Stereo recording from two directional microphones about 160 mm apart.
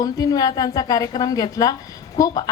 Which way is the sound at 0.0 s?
25° left (ahead or behind).